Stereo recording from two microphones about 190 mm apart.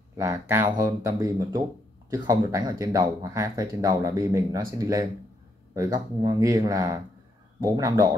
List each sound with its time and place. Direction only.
0.2 s a man's voice: 15° right (ahead or behind)